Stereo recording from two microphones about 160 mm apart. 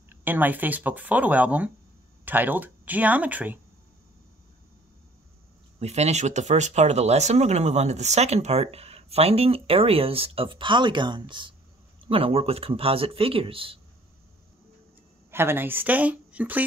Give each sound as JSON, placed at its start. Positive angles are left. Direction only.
{"t": 0.1, "sound": "speech", "side_deg": -10}
{"t": 5.8, "sound": "speech", "side_deg": -45}
{"t": 15.3, "sound": "speech", "side_deg": -15}